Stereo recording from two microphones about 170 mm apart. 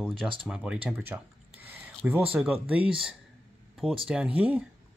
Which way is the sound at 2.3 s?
5° right (ahead or behind).